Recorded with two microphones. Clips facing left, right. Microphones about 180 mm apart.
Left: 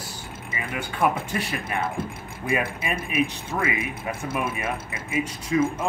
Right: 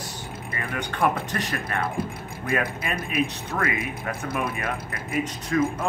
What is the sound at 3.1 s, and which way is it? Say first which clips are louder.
Speech: left 1 dB; 20° left (ahead or behind).